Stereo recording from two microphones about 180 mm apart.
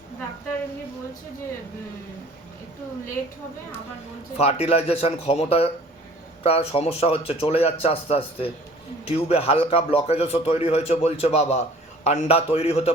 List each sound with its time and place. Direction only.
4.4 s a man's voice: 35° left (ahead or behind)